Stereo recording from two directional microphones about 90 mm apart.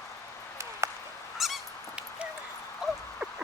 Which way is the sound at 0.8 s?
35° right (ahead or behind).